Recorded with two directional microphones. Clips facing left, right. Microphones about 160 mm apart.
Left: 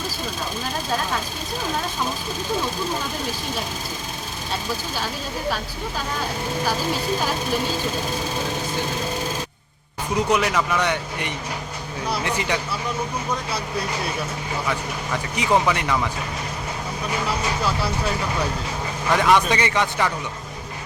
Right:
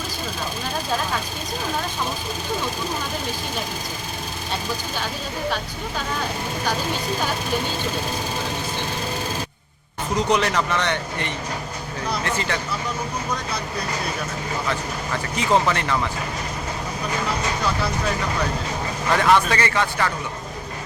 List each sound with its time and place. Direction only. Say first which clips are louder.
10.2 s speech: even; 5° left (ahead or behind)
14.7 s speech: left 2 dB; 10° left (ahead or behind)
19.1 s speech: even; 10° left (ahead or behind)